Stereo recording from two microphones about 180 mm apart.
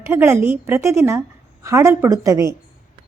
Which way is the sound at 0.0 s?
15° right (ahead or behind).